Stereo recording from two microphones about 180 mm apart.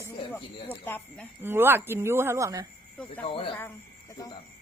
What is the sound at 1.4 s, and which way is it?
A woman's voice, 10° right (ahead or behind).